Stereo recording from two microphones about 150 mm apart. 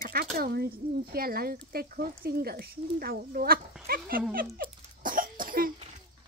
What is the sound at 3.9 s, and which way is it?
Dog, 75° right (ahead or behind).